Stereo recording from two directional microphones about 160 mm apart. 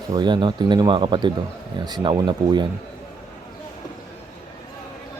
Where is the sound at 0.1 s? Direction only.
25° right (ahead or behind).